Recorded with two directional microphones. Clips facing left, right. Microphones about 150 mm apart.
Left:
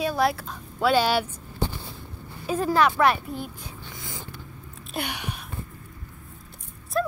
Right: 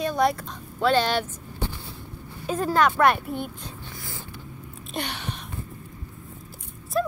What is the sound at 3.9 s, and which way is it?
Vehicle, 20° left (ahead or behind).